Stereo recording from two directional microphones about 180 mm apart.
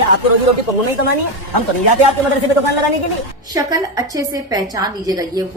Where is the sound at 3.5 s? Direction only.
20° right (ahead or behind).